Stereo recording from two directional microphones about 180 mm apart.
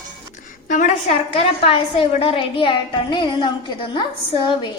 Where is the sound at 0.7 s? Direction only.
45° left (ahead or behind); by 4.7 s 25° left (ahead or behind).